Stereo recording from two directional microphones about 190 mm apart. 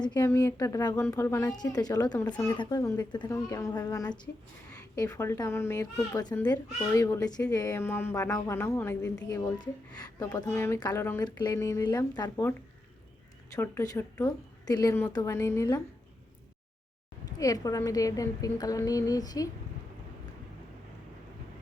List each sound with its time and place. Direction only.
0.0 s a woman's voice: 20° left (ahead or behind)
13.6 s speech: 15° left (ahead or behind)
17.3 s a woman's voice: 20° left (ahead or behind)